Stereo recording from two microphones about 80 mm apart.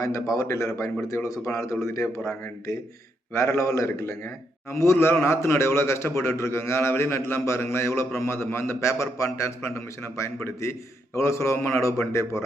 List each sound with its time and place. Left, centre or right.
0.3 s a man's voice: left